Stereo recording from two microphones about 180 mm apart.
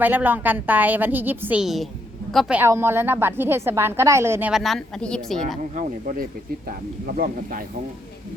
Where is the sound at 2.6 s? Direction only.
15° right (ahead or behind); by 5.6 s centre (ahead or behind).